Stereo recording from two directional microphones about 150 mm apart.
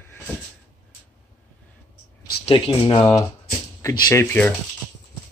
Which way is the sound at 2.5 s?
40° left (ahead or behind).